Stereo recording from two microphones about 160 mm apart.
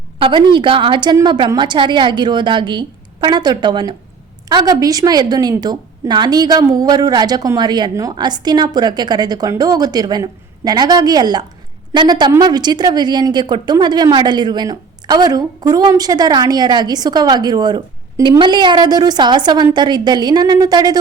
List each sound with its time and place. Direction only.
0.2 s speech: 30° right (ahead or behind)